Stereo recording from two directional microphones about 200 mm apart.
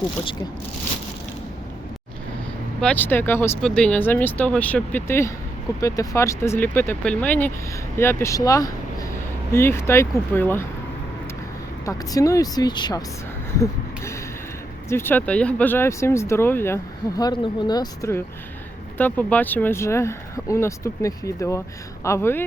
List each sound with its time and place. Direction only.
2.8 s speech: 10° left (ahead or behind)
11.9 s speech: 15° left (ahead or behind)
13.6 s a sound: 15° left (ahead or behind)
14.8 s speech: 10° left (ahead or behind)